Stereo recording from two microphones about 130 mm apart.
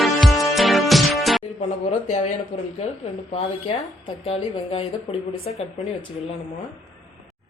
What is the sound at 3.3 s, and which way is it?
Speech, 50° left (ahead or behind).